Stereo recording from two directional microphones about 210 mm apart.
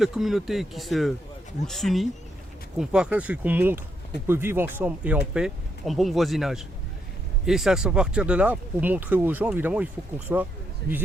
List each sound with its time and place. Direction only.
0.0 s speech: centre (ahead or behind)
10.8 s speech: 50° right (ahead or behind)